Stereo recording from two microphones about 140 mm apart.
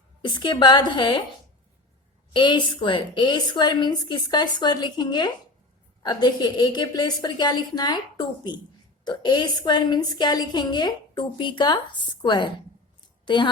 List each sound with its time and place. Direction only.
0.2 s a woman's voice: 35° left (ahead or behind)
2.3 s a woman's voice: 35° left (ahead or behind)